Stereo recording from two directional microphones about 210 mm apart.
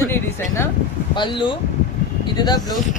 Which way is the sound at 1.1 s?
20° left (ahead or behind).